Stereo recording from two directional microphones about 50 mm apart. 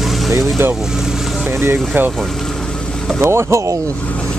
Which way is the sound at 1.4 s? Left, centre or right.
Right.